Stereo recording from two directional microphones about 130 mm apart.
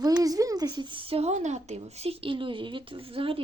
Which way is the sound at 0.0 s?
30° right (ahead or behind).